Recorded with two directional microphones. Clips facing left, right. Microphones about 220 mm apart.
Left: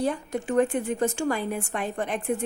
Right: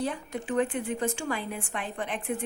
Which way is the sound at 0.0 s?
45° left (ahead or behind).